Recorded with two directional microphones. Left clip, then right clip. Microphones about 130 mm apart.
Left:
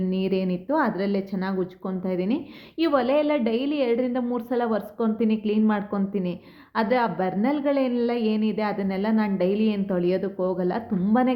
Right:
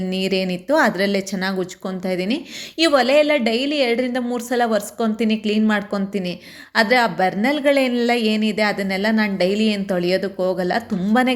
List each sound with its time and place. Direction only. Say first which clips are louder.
0.1 s a woman's voice: right 6 dB; 20° right (ahead or behind)